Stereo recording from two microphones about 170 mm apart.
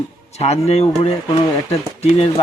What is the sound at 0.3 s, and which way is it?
Speech, 40° left (ahead or behind).